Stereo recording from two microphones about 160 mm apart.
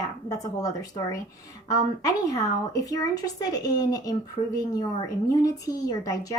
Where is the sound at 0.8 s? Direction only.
20° left (ahead or behind).